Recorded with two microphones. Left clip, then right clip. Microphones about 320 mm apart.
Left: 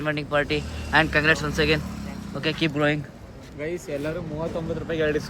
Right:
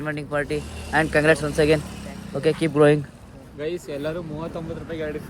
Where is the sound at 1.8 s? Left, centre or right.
Right.